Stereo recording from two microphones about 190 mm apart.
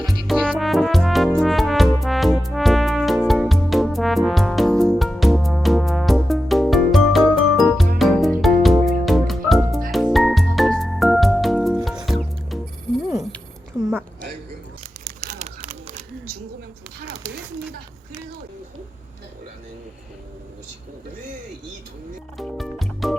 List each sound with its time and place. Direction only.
0.0 s music: 5° left (ahead or behind)
15.2 s a sound: 45° right (ahead or behind)
22.4 s music: centre (ahead or behind)